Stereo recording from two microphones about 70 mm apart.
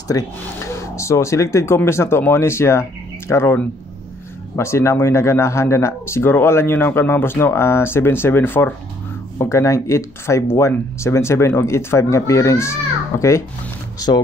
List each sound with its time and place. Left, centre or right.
0.1 s speech: left
0.9 s speech: left
4.6 s speech: left
9.4 s speech: left
13.9 s speech: left